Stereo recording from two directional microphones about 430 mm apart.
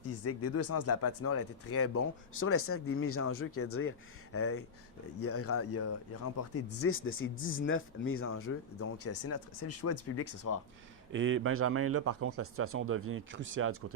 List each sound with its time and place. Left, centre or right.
0.0 s speech: left
11.1 s a man's voice: right